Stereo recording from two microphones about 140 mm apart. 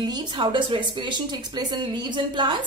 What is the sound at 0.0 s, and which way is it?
A woman's voice, 30° right (ahead or behind).